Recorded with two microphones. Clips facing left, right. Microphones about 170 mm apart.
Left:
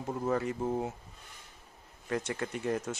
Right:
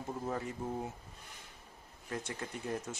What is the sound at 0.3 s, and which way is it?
Speech, 80° left.